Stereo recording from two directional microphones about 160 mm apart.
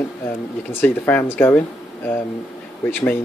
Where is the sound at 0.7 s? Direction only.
15° left (ahead or behind).